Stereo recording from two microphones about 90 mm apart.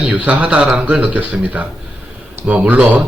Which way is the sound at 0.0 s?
15° right (ahead or behind).